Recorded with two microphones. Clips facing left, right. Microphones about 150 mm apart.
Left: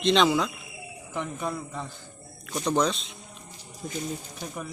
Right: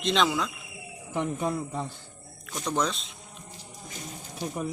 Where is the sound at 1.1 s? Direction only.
25° right (ahead or behind).